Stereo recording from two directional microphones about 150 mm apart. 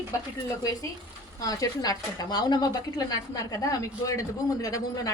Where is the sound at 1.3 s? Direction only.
25° left (ahead or behind).